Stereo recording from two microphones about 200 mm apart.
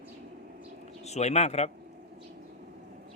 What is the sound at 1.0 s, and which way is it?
Speech, 35° left (ahead or behind).